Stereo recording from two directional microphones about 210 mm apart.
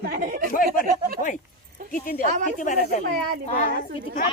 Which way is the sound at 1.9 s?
45° left (ahead or behind).